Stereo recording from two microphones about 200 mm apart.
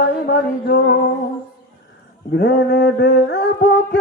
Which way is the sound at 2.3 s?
60° left (ahead or behind).